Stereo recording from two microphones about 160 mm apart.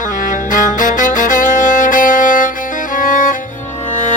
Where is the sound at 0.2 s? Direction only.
55° left (ahead or behind).